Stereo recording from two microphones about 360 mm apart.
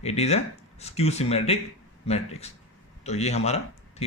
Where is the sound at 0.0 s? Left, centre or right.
Centre.